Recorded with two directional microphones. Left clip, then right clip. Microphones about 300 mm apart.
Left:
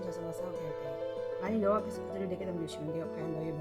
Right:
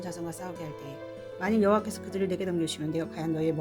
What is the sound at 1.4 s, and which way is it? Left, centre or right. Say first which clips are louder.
Speech: right 7 dB; right.